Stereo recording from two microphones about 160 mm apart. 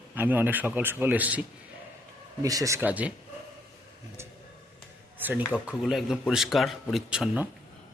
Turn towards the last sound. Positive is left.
turn(degrees=-5)  # may be behind; listen again after turning